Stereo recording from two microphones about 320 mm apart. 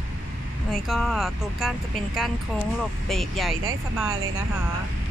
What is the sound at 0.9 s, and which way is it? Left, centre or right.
Speech, centre.